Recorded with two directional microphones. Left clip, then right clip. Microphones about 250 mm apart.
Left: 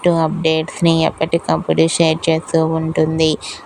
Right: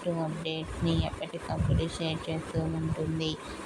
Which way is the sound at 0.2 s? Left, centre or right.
Left.